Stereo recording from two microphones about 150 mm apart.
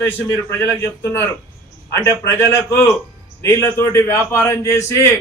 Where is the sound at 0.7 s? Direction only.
15° left (ahead or behind).